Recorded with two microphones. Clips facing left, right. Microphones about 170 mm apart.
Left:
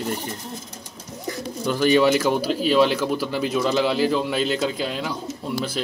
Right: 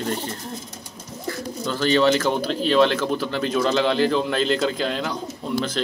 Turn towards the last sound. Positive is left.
turn(degrees=5)  # may be behind; listen again after turning